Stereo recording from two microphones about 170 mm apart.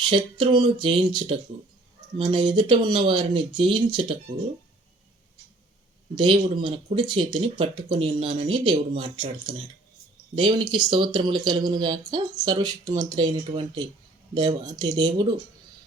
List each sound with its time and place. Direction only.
0.0 s a sound: 30° right (ahead or behind)
0.5 s speech: 30° right (ahead or behind)
6.1 s speech: 30° right (ahead or behind)